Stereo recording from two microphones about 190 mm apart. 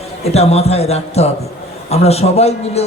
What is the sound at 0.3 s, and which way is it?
A man's voice, 35° left (ahead or behind).